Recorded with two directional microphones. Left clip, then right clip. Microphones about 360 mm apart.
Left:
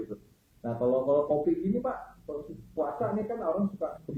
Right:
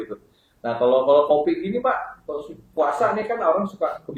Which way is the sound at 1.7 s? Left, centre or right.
Centre.